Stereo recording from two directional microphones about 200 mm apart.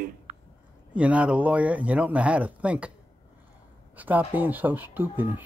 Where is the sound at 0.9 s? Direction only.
5° right (ahead or behind).